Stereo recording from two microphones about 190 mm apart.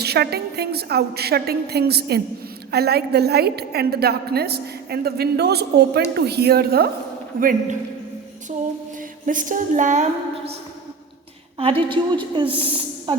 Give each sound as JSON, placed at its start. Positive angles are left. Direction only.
{"t": 0.0, "sound": "a woman's voice", "side_deg": -60}
{"t": 9.2, "sound": "a woman's voice", "side_deg": -45}
{"t": 11.5, "sound": "a woman's voice", "side_deg": -30}